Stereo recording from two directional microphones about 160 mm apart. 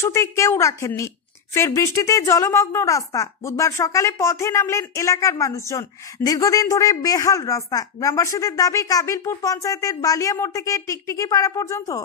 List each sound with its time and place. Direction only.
0.0 s a woman's voice: 15° left (ahead or behind)